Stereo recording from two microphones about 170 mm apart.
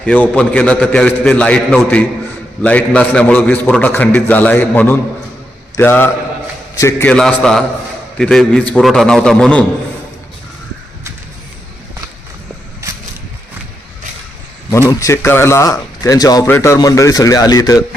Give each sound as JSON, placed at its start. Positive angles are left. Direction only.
{"t": 0.0, "sound": "a man's voice", "side_deg": 5}
{"t": 7.1, "sound": "a man's voice", "side_deg": 5}
{"t": 12.8, "sound": "a sound", "side_deg": -20}
{"t": 14.7, "sound": "a man's voice", "side_deg": 15}